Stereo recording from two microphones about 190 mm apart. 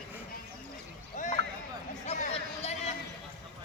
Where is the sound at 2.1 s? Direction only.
35° left (ahead or behind).